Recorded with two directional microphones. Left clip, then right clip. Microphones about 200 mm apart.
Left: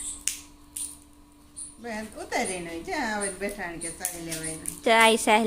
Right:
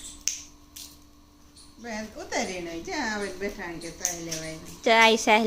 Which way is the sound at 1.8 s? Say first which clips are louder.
Even; 5° left (ahead or behind).